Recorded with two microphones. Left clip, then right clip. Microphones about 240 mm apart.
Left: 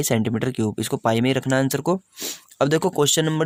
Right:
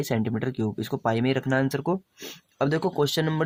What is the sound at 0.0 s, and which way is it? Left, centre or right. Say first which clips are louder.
Speech: left 5 dB; left.